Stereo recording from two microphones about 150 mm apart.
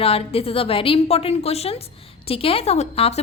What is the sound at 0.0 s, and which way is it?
A woman's voice, 40° left (ahead or behind).